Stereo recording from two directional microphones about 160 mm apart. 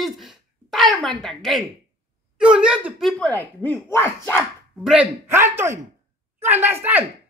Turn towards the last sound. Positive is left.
turn(degrees=-10)  # may be behind; listen again after turning